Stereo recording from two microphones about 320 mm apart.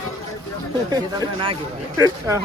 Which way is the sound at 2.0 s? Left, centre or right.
Centre.